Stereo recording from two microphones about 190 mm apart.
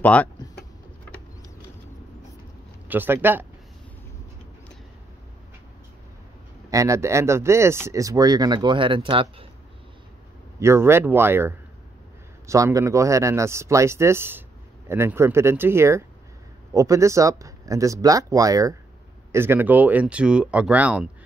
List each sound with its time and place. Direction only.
0.0 s speech: 5° left (ahead or behind)
2.9 s speech: 10° right (ahead or behind)
6.7 s speech: 15° right (ahead or behind)
10.6 s speech: 15° right (ahead or behind)